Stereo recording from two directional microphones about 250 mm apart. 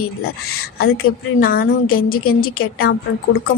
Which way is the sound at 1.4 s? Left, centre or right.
Left.